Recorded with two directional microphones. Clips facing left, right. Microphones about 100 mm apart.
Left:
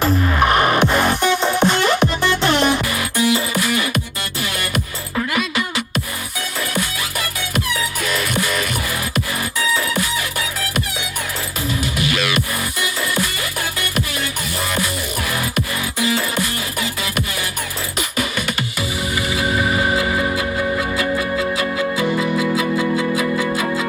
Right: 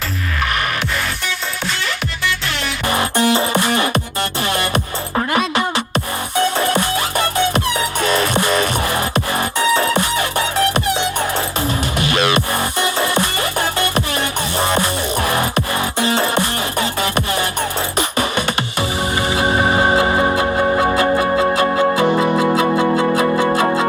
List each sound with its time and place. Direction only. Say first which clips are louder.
0.0 s music: left 6 dB; 25° left (ahead or behind)
2.9 s music: right 3 dB; 35° right (ahead or behind)